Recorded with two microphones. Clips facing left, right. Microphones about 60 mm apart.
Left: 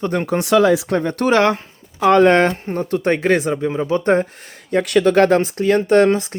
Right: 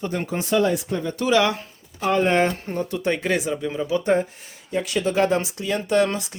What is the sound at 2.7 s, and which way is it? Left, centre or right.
Speech, left.